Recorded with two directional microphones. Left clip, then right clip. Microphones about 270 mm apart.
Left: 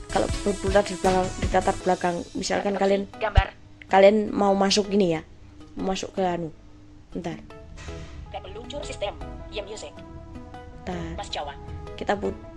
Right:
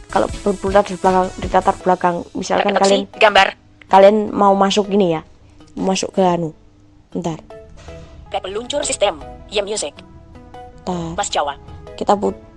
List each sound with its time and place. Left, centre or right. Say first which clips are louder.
0.1 s speech: right 7 dB; centre
3.2 s speech: right 16 dB; right
3.8 s speech: right 7 dB; centre
5.8 s a woman's voice: right 10 dB; right